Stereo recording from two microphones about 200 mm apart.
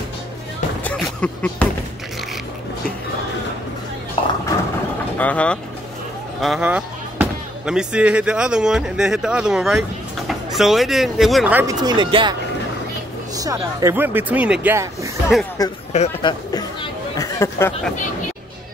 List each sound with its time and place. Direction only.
0.8 s speech: 5° left (ahead or behind)
4.2 s a sound: 25° left (ahead or behind)
5.1 s speech: 5° left (ahead or behind); by 11.7 s 10° right (ahead or behind)
11.8 s speech: 20° right (ahead or behind)
15.9 s speech: 30° left (ahead or behind)
17.2 s speech: 15° left (ahead or behind)